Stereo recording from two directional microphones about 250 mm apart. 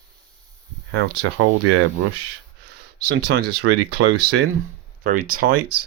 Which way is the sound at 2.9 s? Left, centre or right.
Right.